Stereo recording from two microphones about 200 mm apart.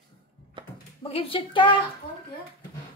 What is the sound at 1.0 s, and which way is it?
Speech, 30° left (ahead or behind).